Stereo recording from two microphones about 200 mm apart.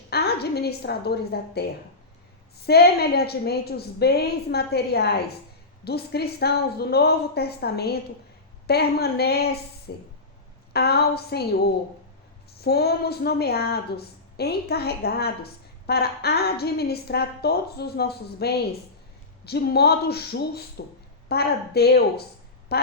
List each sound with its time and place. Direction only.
0.1 s a woman's voice: 50° left (ahead or behind)